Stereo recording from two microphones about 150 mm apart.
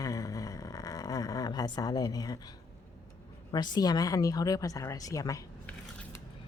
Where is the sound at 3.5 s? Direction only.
30° left (ahead or behind).